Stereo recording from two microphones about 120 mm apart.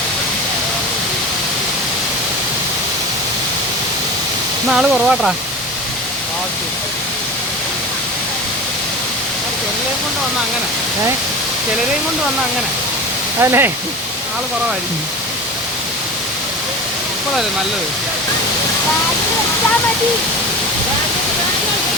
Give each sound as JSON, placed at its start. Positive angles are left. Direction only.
{"t": 4.7, "sound": "speech", "side_deg": -5}
{"t": 13.4, "sound": "speech", "side_deg": -20}